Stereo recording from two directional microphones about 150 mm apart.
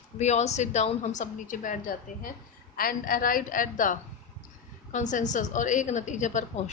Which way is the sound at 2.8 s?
70° left (ahead or behind).